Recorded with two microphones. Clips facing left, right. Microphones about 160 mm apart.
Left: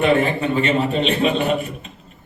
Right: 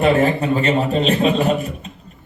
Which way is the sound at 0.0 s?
40° right (ahead or behind).